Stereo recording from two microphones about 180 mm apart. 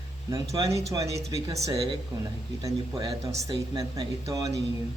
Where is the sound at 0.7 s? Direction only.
15° right (ahead or behind).